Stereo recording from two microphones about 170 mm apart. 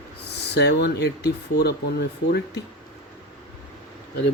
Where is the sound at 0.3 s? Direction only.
75° left (ahead or behind).